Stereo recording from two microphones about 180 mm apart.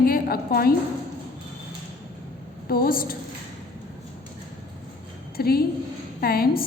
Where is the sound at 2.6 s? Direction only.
55° left (ahead or behind).